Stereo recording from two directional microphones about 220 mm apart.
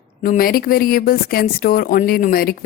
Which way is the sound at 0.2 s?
40° left (ahead or behind).